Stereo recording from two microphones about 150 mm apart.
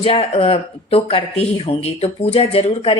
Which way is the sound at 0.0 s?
40° left (ahead or behind).